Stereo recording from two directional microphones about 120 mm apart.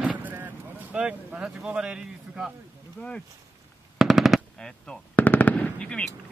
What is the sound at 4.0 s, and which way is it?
Machine gun, centre (ahead or behind).